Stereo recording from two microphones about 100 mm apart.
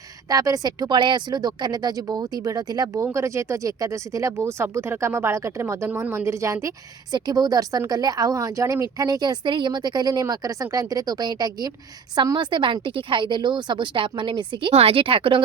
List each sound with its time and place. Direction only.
0.3 s speech: 35° right (ahead or behind)
0.9 s a woman's voice: 50° right (ahead or behind)
14.7 s speech: 85° right; by 15.4 s 65° right (ahead or behind)